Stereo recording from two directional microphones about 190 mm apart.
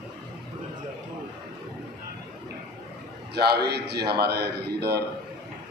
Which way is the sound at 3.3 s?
60° right (ahead or behind).